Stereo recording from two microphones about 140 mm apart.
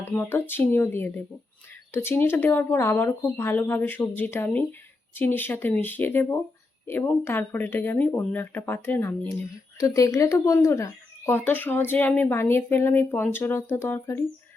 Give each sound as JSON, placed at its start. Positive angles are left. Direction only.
{"t": 0.1, "sound": "speech", "side_deg": 10}